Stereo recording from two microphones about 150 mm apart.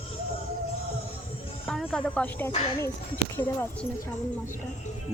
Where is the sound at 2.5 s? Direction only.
45° left (ahead or behind).